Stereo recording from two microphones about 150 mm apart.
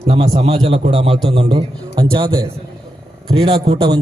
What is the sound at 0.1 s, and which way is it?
A man's voice, 40° right (ahead or behind).